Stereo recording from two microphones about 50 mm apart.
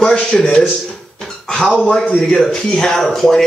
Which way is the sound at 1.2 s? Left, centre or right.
Centre.